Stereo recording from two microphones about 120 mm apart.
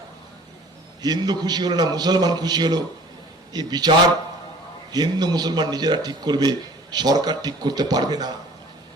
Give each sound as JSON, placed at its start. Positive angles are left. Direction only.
{"t": 1.0, "sound": "a man's voice", "side_deg": -35}